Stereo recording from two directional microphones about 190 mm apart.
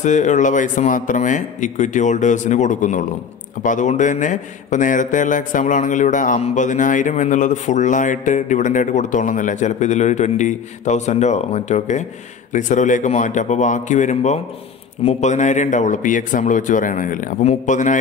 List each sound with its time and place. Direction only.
0.0 s a man's voice: 40° left (ahead or behind)